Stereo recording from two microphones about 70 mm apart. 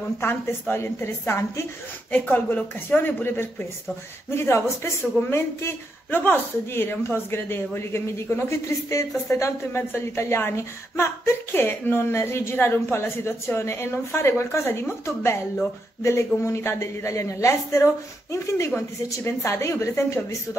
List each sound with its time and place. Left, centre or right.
0.2 s a woman's voice: left
2.0 s a woman's voice: left